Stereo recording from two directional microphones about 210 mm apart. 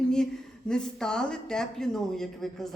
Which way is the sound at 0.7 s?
5° left (ahead or behind).